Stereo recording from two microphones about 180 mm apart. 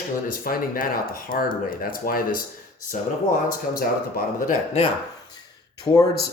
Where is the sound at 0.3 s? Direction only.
55° left (ahead or behind).